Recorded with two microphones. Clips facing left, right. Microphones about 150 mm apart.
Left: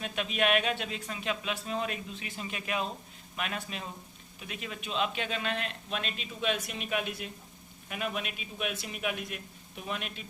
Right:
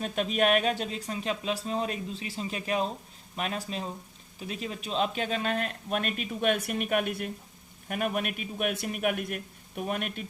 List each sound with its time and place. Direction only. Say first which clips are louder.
0.0 s speech: right 4 dB; 40° right (ahead or behind)